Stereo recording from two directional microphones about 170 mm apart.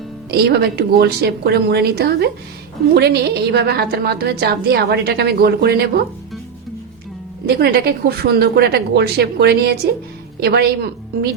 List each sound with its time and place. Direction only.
0.3 s a woman's voice: 65° right (ahead or behind)
7.4 s a woman's voice: 65° right (ahead or behind)